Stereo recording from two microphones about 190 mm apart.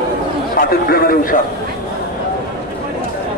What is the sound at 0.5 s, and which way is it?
Speech, 50° left (ahead or behind).